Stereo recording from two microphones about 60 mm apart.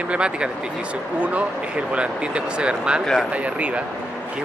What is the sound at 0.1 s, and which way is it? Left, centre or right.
Speech, centre.